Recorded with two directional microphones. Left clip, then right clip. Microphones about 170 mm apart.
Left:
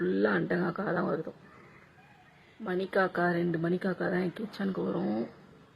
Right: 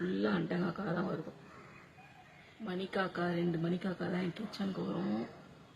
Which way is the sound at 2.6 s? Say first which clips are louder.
Left 8 dB; 30° left (ahead or behind).